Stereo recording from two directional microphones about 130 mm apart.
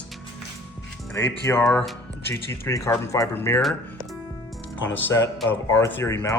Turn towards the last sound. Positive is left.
turn(degrees=20)  # may be behind; listen again after turning